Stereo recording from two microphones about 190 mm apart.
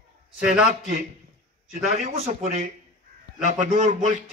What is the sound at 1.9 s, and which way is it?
A man's voice, 40° right (ahead or behind).